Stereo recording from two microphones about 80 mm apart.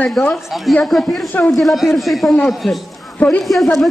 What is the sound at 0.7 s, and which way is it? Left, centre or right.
A man's voice, centre.